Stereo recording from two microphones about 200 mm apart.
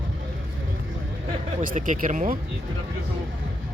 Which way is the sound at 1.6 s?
40° right (ahead or behind).